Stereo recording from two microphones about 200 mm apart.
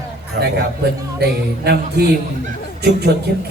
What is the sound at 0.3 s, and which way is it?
Speech, 55° right (ahead or behind).